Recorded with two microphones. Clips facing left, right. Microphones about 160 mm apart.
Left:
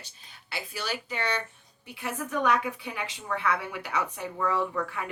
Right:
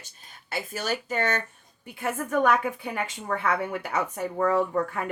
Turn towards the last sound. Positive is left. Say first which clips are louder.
# right 5 dB
turn(degrees=-45)  # may be behind; listen again after turning